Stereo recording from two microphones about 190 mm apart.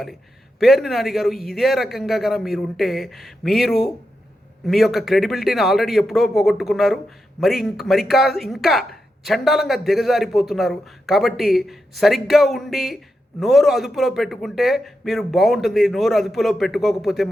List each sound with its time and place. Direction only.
0.6 s a man's voice: centre (ahead or behind)